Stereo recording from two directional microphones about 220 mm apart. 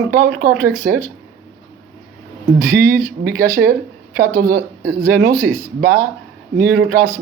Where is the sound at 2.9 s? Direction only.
40° right (ahead or behind).